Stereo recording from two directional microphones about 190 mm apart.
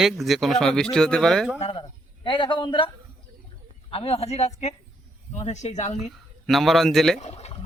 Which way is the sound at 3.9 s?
30° left (ahead or behind).